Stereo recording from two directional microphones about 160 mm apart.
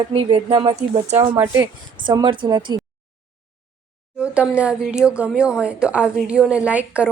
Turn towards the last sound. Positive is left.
turn(degrees=-10)  # may be behind; listen again after turning